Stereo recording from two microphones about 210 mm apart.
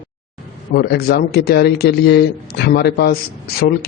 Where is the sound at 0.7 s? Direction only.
50° left (ahead or behind).